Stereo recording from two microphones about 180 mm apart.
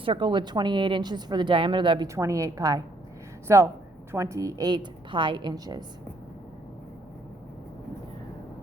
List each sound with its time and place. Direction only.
0.0 s a woman's voice: 25° right (ahead or behind)